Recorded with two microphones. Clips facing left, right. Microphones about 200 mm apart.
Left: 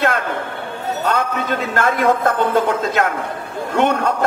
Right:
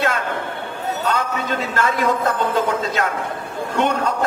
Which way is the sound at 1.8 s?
55° left (ahead or behind).